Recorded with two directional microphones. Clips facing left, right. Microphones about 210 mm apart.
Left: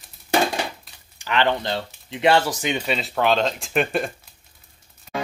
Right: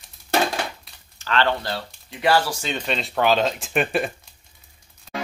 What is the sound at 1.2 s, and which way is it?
Speech, 15° left (ahead or behind).